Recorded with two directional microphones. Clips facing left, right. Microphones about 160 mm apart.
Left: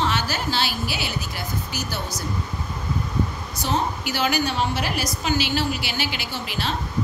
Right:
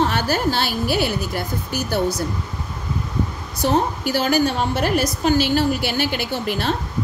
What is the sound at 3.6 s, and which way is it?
A woman's voice, 55° right (ahead or behind).